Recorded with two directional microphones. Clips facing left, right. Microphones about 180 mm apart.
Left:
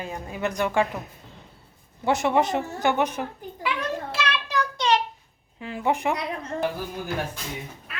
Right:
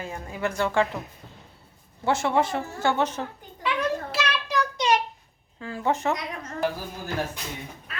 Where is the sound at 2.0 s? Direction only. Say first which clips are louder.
Left 2 dB; 15° left (ahead or behind).